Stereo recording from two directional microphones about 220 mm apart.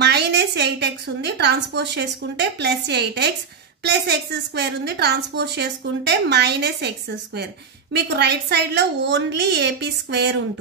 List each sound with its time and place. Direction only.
0.0 s a woman's voice: 50° right (ahead or behind)
7.9 s a woman's voice: 50° right (ahead or behind)